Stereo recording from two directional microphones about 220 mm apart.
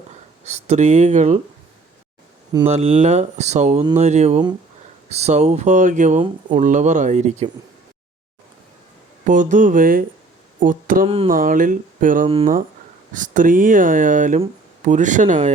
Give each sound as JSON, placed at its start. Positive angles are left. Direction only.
{"t": 0.4, "sound": "speech", "side_deg": -30}
{"t": 2.6, "sound": "speech", "side_deg": -30}
{"t": 9.2, "sound": "speech", "side_deg": -35}
{"t": 11.0, "sound": "speech", "side_deg": -25}
{"t": 11.3, "sound": "speech", "side_deg": -40}